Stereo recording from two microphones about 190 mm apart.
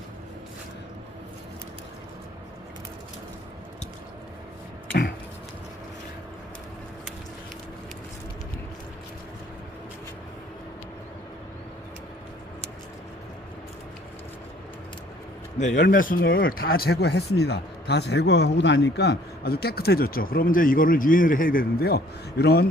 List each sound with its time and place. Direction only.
15.9 s speech: 45° left (ahead or behind)